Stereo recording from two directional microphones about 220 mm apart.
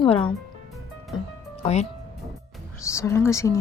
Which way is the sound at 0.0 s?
25° left (ahead or behind).